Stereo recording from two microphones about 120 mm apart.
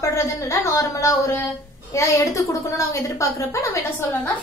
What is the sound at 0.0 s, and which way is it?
A woman's voice, 25° left (ahead or behind).